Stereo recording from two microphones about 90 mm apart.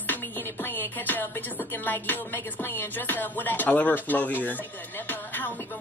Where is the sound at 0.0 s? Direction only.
25° left (ahead or behind).